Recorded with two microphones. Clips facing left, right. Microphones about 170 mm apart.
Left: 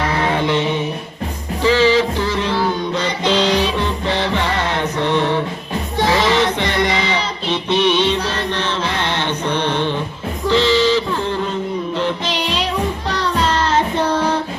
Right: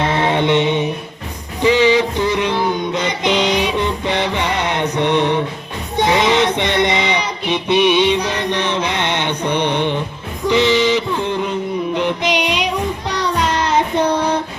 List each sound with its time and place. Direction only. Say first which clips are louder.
0.0 s mantra: right 2 dB; 25° right (ahead or behind)
1.6 s music: right 1 dB; 20° right (ahead or behind)
6.0 s a sound: right 2 dB; 20° right (ahead or behind)
10.4 s music: right 1 dB; 15° right (ahead or behind)
11.9 s child singing: right 4 dB; 15° right (ahead or behind)